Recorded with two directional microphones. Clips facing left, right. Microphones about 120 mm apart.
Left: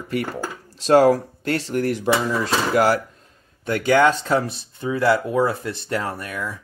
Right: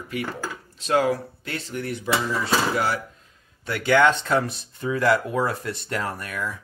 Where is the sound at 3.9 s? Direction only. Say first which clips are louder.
Left 1 dB; 35° left (ahead or behind).